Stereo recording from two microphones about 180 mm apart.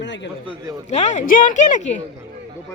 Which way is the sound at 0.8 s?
40° left (ahead or behind).